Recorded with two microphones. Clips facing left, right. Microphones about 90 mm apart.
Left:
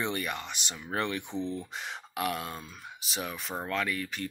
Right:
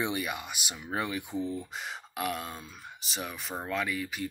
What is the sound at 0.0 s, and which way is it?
Speech, 10° right (ahead or behind).